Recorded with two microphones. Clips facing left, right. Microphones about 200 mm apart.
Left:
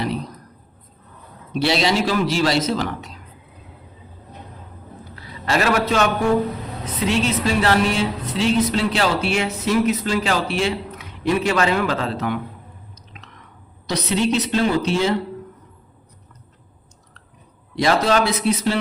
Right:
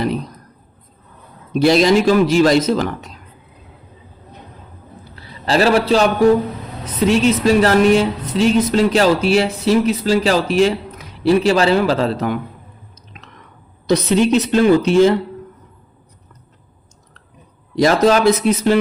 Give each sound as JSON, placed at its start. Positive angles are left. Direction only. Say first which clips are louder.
{"t": 1.6, "sound": "speech", "louder": "right 7 dB", "side_deg": -45}
{"t": 5.1, "sound": "a sound", "louder": "right 5 dB", "side_deg": -30}
{"t": 7.1, "sound": "a woman's voice", "louder": "right 7 dB", "side_deg": -40}
{"t": 13.9, "sound": "speech", "louder": "right 6 dB", "side_deg": -50}
{"t": 17.7, "sound": "speech", "louder": "right 5 dB", "side_deg": -40}